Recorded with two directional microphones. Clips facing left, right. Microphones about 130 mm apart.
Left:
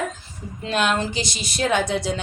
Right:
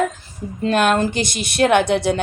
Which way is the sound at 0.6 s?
50° right (ahead or behind).